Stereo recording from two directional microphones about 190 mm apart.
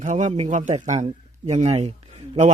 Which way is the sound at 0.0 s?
40° right (ahead or behind).